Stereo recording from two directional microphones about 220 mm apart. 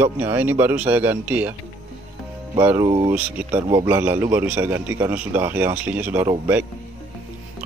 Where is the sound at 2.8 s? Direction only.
30° right (ahead or behind).